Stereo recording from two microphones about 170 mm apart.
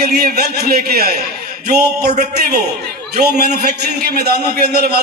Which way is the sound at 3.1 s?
70° right (ahead or behind).